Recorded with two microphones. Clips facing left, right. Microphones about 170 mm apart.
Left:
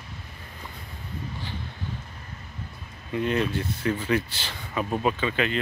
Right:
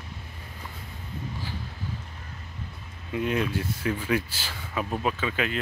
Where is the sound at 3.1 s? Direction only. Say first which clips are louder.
Left 1 dB; 5° right (ahead or behind).